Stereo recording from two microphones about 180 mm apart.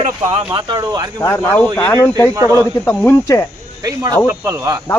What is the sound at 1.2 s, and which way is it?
Speech, 15° left (ahead or behind).